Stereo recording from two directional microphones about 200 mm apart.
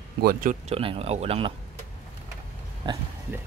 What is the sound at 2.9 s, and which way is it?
Speech, 20° right (ahead or behind).